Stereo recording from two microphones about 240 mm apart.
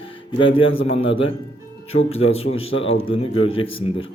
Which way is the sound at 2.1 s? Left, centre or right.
Left.